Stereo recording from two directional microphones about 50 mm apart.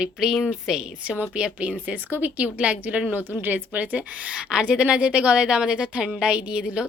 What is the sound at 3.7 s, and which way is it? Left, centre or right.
A woman's voice, right.